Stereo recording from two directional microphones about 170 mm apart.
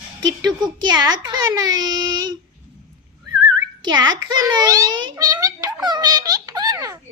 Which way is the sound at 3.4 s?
25° right (ahead or behind).